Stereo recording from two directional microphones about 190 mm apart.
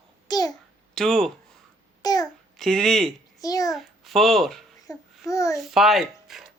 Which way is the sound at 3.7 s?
Centre (ahead or behind).